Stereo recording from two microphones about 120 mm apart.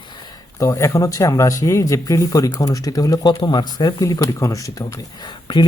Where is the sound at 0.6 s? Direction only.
25° left (ahead or behind).